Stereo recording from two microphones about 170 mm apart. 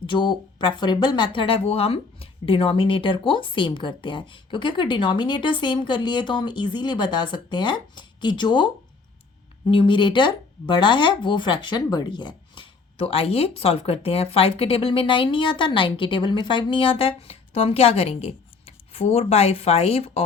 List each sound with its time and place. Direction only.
0.0 s speech: 30° left (ahead or behind)